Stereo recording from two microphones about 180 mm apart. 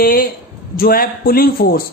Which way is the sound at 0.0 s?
55° left (ahead or behind).